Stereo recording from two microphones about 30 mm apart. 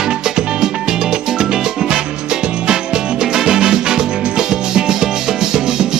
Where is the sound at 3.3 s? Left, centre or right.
Right.